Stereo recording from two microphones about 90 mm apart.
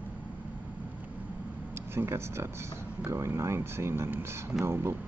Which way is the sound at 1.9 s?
30° right (ahead or behind).